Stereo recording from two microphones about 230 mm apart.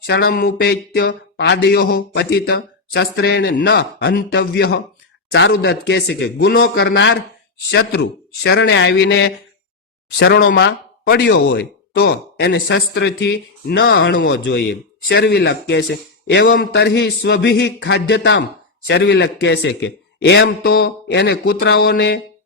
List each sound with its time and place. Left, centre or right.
0.0 s speech: left